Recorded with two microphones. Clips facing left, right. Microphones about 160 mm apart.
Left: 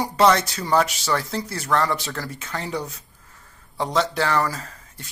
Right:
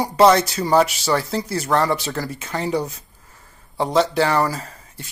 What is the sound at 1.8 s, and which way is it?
Speech, 15° right (ahead or behind).